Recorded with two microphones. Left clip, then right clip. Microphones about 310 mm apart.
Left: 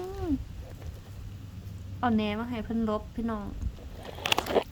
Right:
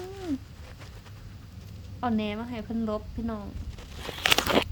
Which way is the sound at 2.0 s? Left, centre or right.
Centre.